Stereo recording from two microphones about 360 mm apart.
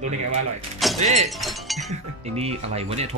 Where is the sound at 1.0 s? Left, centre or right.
Centre.